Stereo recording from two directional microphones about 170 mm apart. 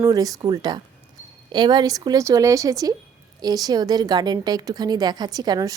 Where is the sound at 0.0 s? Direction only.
20° right (ahead or behind).